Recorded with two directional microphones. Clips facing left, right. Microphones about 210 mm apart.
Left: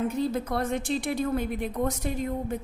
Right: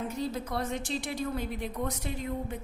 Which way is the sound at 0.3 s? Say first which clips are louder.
Left 5 dB; 55° left (ahead or behind).